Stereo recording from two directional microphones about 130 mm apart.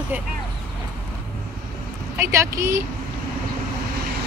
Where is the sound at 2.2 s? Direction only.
20° right (ahead or behind).